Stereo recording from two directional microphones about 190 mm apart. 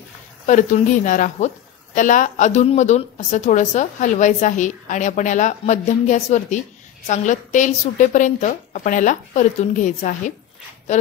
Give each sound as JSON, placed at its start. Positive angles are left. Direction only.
{"t": 0.5, "sound": "a woman's voice", "side_deg": 40}